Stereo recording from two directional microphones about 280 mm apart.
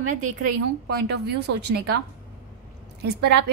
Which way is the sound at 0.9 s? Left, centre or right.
Right.